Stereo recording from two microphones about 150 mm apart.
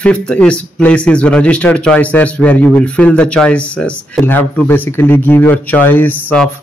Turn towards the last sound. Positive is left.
turn(degrees=10)  # may be behind; listen again after turning